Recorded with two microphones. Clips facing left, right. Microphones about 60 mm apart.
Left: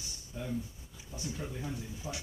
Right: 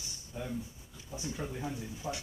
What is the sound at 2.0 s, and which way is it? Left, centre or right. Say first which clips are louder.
Speech: right 4 dB; right.